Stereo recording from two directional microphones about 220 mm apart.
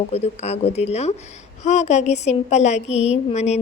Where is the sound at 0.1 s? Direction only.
30° left (ahead or behind).